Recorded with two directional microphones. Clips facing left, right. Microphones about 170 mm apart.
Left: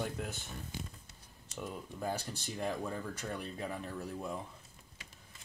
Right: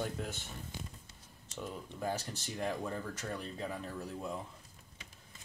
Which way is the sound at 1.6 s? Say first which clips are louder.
Even; 5° left (ahead or behind).